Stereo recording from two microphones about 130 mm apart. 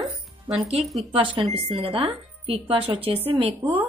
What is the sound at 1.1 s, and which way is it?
Speech, 40° right (ahead or behind).